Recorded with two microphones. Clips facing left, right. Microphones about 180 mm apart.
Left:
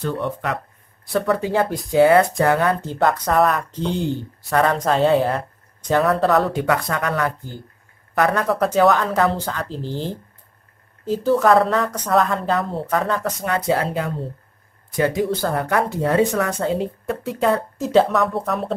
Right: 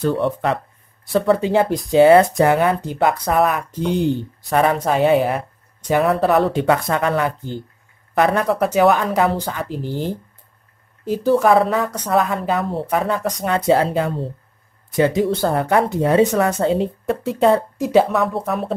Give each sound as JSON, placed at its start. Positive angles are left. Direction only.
{"t": 0.0, "sound": "speech", "side_deg": -30}
{"t": 8.5, "sound": "speech", "side_deg": -10}
{"t": 13.1, "sound": "speech", "side_deg": -25}
{"t": 17.7, "sound": "speech", "side_deg": -10}